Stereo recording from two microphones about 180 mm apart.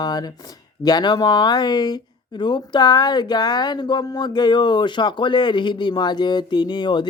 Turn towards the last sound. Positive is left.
turn(degrees=25)  # may be behind; listen again after turning